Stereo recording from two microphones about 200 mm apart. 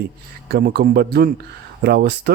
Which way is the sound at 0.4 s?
50° right (ahead or behind).